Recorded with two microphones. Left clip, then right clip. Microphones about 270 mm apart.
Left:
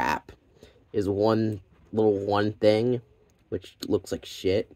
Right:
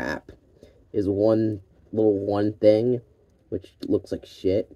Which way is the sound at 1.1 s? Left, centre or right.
Left.